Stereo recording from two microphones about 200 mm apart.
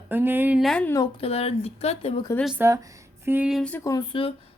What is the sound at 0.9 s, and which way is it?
Speech, 25° left (ahead or behind).